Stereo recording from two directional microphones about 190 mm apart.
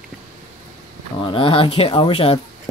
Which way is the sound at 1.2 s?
25° left (ahead or behind).